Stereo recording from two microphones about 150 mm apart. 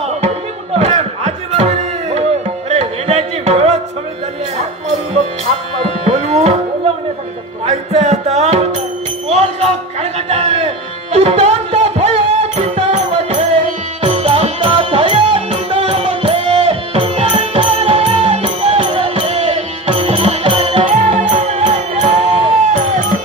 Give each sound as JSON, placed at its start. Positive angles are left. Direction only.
{"t": 0.7, "sound": "a sound", "side_deg": -45}
{"t": 2.7, "sound": "music", "side_deg": -45}
{"t": 7.6, "sound": "music", "side_deg": -45}
{"t": 9.3, "sound": "a sound", "side_deg": -45}
{"t": 10.1, "sound": "music", "side_deg": -45}
{"t": 14.0, "sound": "music", "side_deg": -40}
{"t": 20.9, "sound": "music", "side_deg": -50}